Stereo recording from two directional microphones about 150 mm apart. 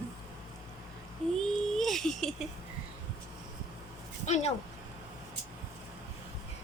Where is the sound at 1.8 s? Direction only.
Centre (ahead or behind).